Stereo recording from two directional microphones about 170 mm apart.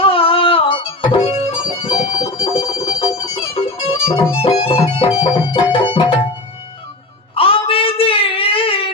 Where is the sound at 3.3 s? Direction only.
35° left (ahead or behind).